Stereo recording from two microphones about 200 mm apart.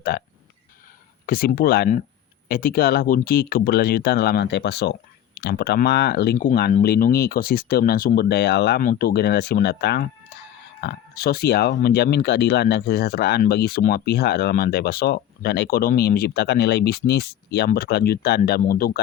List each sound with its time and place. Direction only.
0.1 s speech: 55° left (ahead or behind)
1.3 s speech: 45° left (ahead or behind)